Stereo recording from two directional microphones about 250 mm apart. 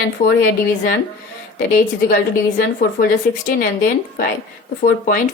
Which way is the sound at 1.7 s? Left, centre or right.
Left.